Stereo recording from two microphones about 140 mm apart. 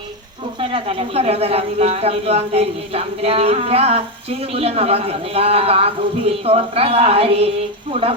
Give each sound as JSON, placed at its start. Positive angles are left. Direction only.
{"t": 0.6, "sound": "speech", "side_deg": -40}